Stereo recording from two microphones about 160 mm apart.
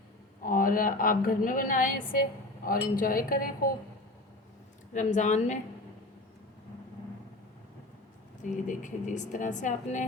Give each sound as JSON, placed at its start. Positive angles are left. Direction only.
{"t": 0.4, "sound": "a woman's voice", "side_deg": 60}
{"t": 4.9, "sound": "a woman's voice", "side_deg": 50}
{"t": 8.6, "sound": "a woman's voice", "side_deg": 50}